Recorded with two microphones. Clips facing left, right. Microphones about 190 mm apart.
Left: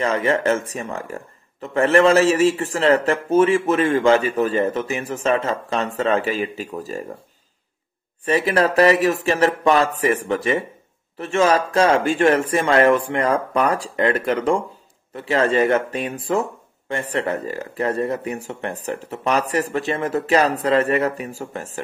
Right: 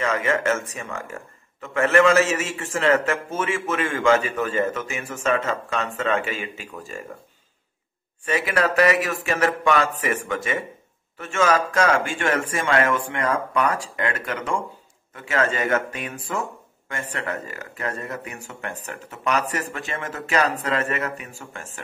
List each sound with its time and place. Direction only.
0.0 s speech: 35° left (ahead or behind)
8.3 s speech: 35° left (ahead or behind)